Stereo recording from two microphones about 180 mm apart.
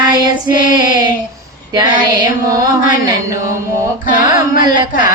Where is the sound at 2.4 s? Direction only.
20° right (ahead or behind).